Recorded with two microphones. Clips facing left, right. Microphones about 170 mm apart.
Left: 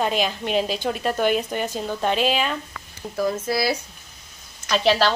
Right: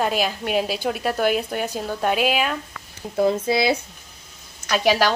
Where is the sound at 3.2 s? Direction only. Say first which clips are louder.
Right 4 dB; 25° right (ahead or behind).